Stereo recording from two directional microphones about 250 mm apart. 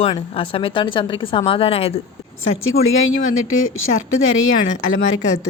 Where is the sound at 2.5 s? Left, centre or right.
Left.